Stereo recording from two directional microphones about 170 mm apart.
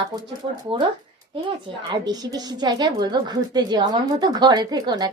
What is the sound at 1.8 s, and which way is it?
A woman's voice, 25° right (ahead or behind).